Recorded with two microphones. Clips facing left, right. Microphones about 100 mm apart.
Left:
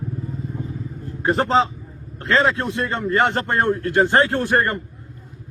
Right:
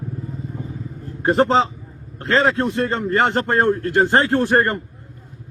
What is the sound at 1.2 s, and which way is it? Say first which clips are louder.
A man's voice: right 2 dB; 30° right (ahead or behind).